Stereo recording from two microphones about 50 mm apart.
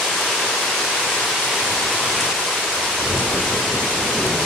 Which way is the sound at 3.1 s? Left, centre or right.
Centre.